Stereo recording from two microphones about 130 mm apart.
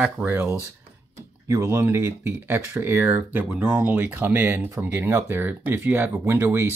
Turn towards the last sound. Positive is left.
turn(degrees=-20)  # may be behind; listen again after turning